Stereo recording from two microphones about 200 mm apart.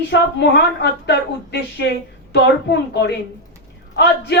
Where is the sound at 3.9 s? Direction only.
60° left (ahead or behind).